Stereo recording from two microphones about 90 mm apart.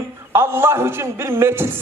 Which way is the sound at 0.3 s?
25° right (ahead or behind).